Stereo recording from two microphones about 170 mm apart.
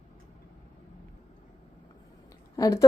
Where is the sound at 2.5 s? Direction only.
20° left (ahead or behind).